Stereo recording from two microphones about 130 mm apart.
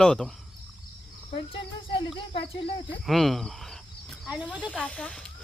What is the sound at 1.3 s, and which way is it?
Speech, 40° left (ahead or behind).